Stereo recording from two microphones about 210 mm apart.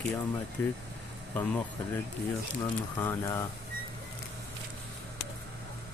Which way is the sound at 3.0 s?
10° left (ahead or behind).